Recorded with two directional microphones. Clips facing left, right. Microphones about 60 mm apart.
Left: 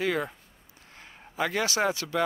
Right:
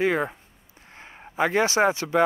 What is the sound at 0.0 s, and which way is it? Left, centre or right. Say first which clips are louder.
Speech: right 5 dB; right.